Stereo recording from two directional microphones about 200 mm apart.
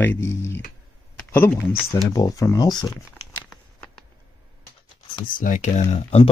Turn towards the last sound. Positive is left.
turn(degrees=30)  # may be behind; listen again after turning